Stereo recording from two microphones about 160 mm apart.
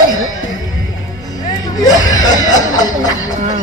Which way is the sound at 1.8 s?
25° left (ahead or behind).